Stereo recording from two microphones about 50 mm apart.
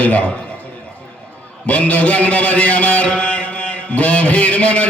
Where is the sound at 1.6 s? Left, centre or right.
Left.